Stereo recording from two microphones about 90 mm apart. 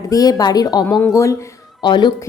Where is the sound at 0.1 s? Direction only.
45° left (ahead or behind).